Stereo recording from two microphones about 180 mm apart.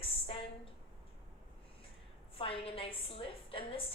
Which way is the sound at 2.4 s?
30° left (ahead or behind).